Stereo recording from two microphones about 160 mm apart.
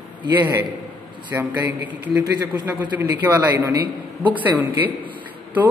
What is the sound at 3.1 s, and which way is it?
A man's voice, 10° right (ahead or behind).